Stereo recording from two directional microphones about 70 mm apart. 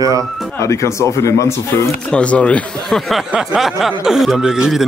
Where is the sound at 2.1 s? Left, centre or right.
Centre.